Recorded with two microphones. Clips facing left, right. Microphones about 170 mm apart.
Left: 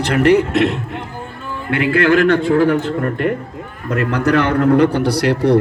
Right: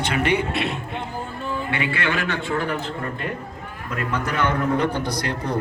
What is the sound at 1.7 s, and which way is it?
A man's voice, 60° left (ahead or behind).